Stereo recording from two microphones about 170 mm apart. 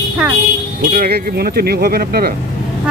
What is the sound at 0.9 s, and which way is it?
Speech, 60° right (ahead or behind).